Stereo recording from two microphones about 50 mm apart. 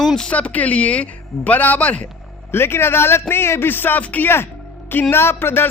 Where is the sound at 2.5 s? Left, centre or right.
Left.